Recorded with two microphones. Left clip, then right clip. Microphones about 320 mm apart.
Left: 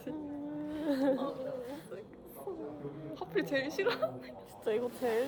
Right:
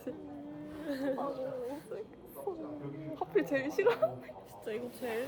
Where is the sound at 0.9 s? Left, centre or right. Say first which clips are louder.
Left 5 dB; centre.